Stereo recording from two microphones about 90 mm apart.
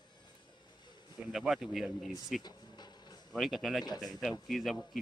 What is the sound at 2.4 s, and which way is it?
Insect, 50° left (ahead or behind).